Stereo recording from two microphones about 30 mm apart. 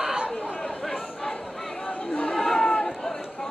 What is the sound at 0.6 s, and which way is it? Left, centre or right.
Chatter, centre.